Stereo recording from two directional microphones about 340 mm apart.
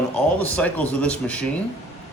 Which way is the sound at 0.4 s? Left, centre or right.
Centre.